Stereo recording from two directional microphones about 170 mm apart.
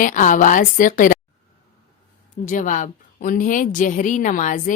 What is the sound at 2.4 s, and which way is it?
A woman's voice, 50° left (ahead or behind).